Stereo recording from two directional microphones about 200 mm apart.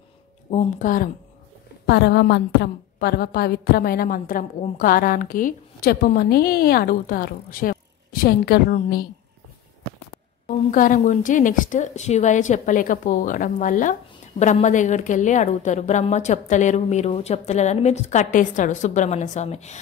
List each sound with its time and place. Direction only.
0.5 s a woman's voice: 40° left (ahead or behind)
1.9 s a woman's voice: 55° left (ahead or behind)
10.4 s a woman's voice: 40° left (ahead or behind)